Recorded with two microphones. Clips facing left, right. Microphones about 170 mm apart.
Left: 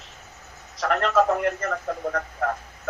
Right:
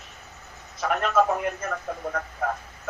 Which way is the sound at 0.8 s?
90° left.